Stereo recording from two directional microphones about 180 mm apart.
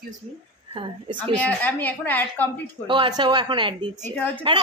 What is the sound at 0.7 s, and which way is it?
Speech, 30° right (ahead or behind).